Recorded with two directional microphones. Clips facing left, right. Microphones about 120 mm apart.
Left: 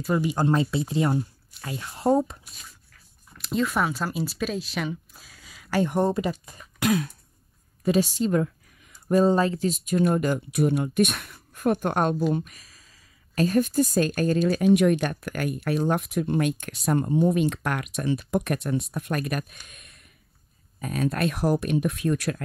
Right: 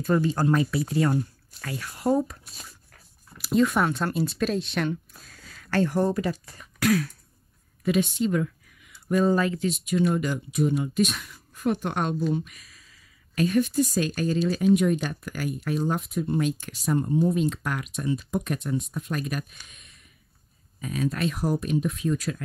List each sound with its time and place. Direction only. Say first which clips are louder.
0.0 s speech: right 1 dB; 15° left (ahead or behind)
0.5 s speech: even; 25° left (ahead or behind)
3.3 s speech: right 3 dB; 5° right (ahead or behind); by 6.6 s 20° left (ahead or behind)
6.8 s throat clearing: right 1 dB; 20° left (ahead or behind)
7.8 s speech: left 1 dB; 35° left (ahead or behind); by 22.4 s 65° left (ahead or behind)